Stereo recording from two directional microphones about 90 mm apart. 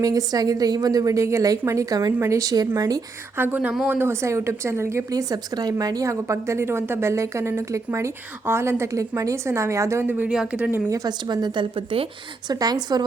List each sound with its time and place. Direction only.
0.0 s a woman's voice: 40° right (ahead or behind)
3.3 s speech: 20° right (ahead or behind)
5.3 s a woman's voice: 45° right (ahead or behind); by 10.2 s 25° right (ahead or behind)
10.2 s speech: 5° right (ahead or behind)
10.8 s speech: 45° right (ahead or behind)
11.7 s a woman's voice: 90° right
12.5 s speech: 50° right (ahead or behind)